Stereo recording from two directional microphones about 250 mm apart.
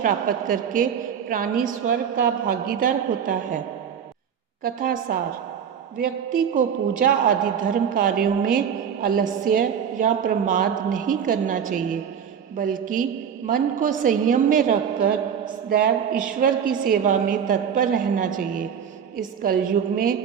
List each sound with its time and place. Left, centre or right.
0.0 s a woman's voice: right
4.6 s a woman's voice: right